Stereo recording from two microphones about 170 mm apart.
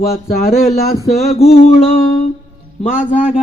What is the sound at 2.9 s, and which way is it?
Speech, 50° left (ahead or behind).